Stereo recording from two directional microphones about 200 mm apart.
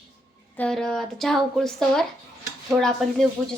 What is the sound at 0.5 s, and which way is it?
Speech, 5° left (ahead or behind).